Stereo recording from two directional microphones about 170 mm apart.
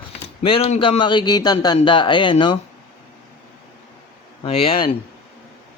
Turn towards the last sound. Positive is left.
turn(degrees=35)  # may be behind; listen again after turning